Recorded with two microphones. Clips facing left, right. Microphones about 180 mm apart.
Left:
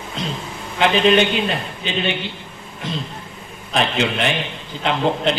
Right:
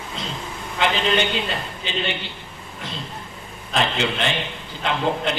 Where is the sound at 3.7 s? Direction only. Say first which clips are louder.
Left 3 dB; 20° left (ahead or behind).